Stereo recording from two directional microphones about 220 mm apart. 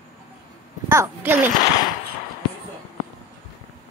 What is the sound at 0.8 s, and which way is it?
Speech, 10° right (ahead or behind).